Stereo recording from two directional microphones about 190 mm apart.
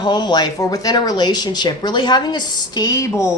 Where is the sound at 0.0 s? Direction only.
25° left (ahead or behind).